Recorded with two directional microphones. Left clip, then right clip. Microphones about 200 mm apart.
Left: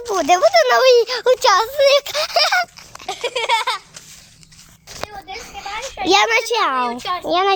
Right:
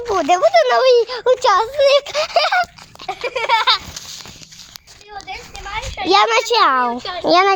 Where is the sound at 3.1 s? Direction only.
45° left (ahead or behind).